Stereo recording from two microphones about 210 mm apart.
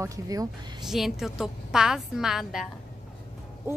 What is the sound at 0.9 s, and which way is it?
A woman's voice, centre (ahead or behind).